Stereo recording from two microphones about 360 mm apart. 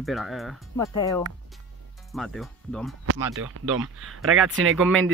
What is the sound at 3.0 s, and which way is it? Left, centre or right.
Speech, right.